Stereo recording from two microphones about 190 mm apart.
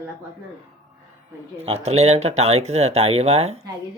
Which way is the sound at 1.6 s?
35° right (ahead or behind).